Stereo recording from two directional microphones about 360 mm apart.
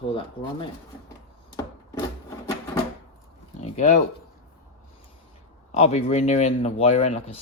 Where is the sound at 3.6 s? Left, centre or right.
Centre.